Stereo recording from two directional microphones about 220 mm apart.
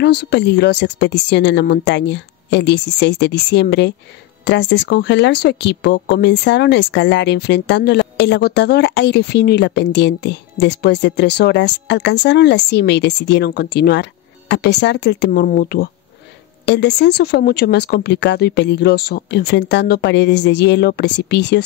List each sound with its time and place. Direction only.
0.0 s speech: 50° left (ahead or behind)